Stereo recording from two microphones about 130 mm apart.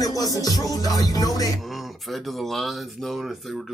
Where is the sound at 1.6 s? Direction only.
Centre (ahead or behind).